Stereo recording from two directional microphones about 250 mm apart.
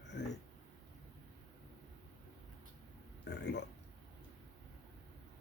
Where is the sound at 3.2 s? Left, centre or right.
Left.